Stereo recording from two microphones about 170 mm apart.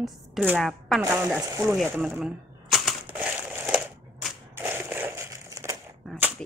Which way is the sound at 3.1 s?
10° right (ahead or behind).